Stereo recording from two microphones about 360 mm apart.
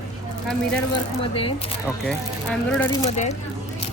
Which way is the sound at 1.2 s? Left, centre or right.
Centre.